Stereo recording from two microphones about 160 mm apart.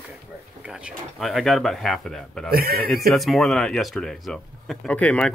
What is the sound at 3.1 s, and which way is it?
Speech, centre (ahead or behind).